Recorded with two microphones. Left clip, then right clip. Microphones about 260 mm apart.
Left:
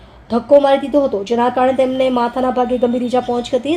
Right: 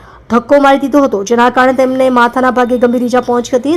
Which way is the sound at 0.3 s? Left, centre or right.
Right.